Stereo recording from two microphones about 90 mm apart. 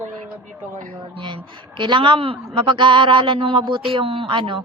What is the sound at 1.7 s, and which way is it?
A woman's voice, 65° right (ahead or behind).